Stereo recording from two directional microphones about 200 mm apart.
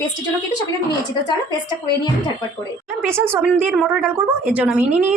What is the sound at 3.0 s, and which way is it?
A woman's voice, 10° right (ahead or behind).